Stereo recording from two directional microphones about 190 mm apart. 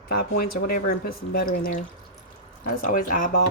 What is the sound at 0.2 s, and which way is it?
Speech, 50° left (ahead or behind).